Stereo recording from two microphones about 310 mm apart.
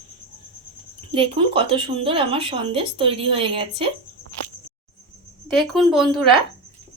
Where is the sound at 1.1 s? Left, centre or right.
Centre.